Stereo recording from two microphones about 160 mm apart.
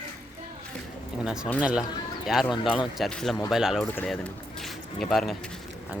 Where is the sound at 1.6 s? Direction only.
5° right (ahead or behind).